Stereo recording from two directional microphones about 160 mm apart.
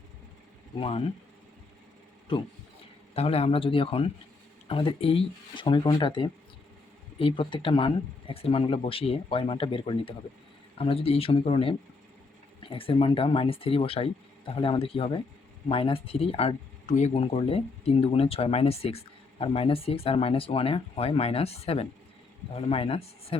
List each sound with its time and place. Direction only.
0.8 s speech: 35° left (ahead or behind)
3.2 s speech: 40° left (ahead or behind)